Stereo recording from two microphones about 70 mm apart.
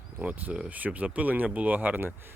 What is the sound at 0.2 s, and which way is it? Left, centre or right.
Speech, right.